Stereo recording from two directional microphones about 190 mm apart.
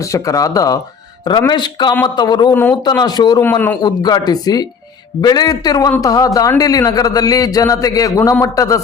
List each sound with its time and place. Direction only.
0.1 s a man's voice: 20° left (ahead or behind)